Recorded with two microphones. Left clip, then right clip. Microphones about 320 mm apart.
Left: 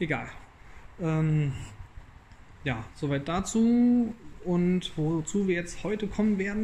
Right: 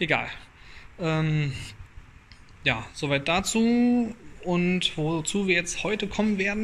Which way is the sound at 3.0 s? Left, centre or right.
Centre.